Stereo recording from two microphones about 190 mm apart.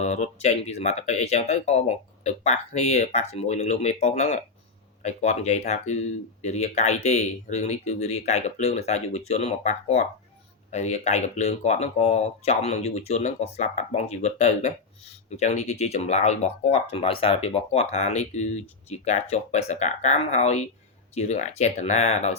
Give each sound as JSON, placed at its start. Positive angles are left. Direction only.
{"t": 0.0, "sound": "speech", "side_deg": 35}